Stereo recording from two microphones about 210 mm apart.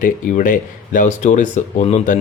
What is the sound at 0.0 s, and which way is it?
Speech, 40° left (ahead or behind).